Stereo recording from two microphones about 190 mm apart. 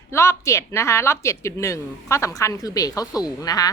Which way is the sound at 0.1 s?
15° left (ahead or behind).